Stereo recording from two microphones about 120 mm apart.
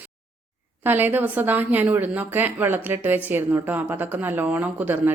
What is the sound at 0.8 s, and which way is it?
A woman's voice, 15° right (ahead or behind).